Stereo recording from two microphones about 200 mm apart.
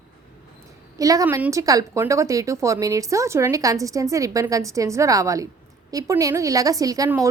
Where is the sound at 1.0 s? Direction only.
15° right (ahead or behind).